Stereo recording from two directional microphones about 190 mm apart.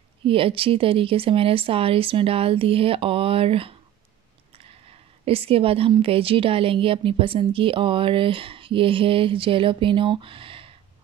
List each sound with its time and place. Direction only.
0.3 s speech: 30° right (ahead or behind)
5.2 s speech: 30° right (ahead or behind)